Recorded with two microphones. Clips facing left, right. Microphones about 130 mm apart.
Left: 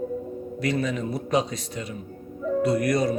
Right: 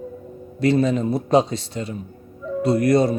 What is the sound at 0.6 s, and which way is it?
A man's voice, 30° right (ahead or behind).